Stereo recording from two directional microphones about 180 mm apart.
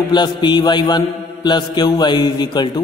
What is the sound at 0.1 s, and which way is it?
A man's voice, 25° left (ahead or behind).